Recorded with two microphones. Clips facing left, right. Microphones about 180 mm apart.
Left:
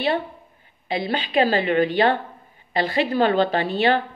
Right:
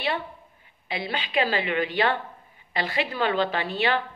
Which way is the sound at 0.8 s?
40° left (ahead or behind).